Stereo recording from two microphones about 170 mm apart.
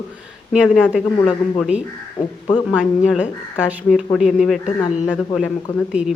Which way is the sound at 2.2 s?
25° left (ahead or behind).